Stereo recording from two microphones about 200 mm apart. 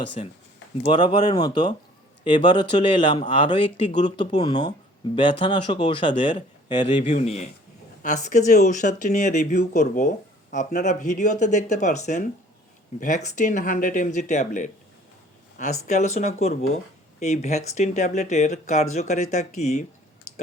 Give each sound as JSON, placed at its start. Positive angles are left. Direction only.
{"t": 0.9, "sound": "speech", "side_deg": 20}